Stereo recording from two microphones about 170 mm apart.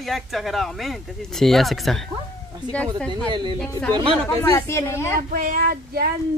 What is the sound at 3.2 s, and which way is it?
Speech, 25° right (ahead or behind).